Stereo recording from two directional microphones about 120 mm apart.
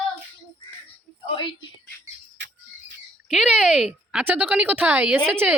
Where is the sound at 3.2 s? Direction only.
5° right (ahead or behind).